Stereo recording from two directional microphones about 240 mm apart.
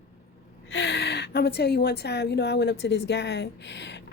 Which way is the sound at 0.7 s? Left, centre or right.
Left.